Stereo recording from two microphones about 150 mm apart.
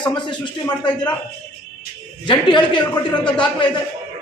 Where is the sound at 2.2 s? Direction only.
30° left (ahead or behind).